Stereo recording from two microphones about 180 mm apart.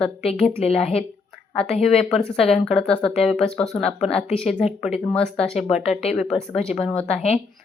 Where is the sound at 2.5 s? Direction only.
Centre (ahead or behind).